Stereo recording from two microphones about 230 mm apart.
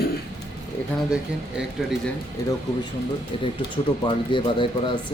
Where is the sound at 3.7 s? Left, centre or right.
Left.